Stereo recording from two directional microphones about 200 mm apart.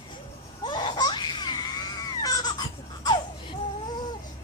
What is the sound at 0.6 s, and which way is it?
Laughter, 25° left (ahead or behind).